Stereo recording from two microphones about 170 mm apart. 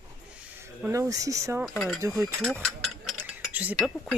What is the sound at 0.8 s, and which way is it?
Speech, 20° right (ahead or behind).